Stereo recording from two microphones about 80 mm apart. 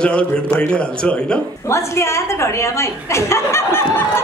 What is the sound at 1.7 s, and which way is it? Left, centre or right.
A woman's voice, left.